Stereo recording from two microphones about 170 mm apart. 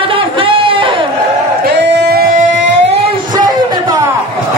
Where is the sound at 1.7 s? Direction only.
80° right.